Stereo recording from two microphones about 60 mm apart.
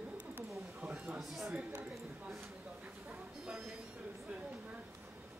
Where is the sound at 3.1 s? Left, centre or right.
Centre.